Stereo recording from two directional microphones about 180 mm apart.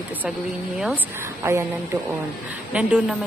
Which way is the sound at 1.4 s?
15° right (ahead or behind).